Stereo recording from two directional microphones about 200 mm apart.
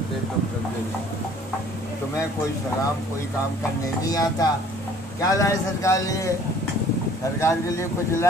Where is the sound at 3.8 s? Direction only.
20° left (ahead or behind).